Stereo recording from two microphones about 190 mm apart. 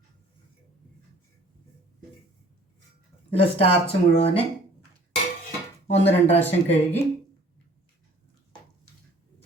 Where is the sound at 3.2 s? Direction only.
30° left (ahead or behind).